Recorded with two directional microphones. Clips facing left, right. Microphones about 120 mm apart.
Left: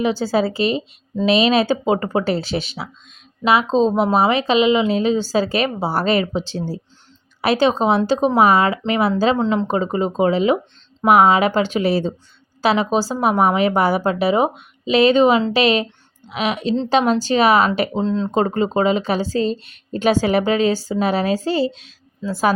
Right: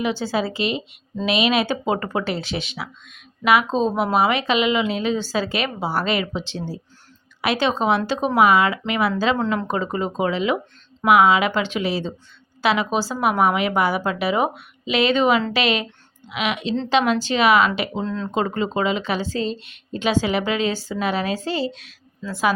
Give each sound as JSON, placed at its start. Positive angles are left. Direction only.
{"t": 0.0, "sound": "a woman's voice", "side_deg": 35}
{"t": 9.4, "sound": "a woman's voice", "side_deg": 20}
{"t": 18.0, "sound": "speech", "side_deg": 25}
{"t": 18.3, "sound": "a woman's voice", "side_deg": 35}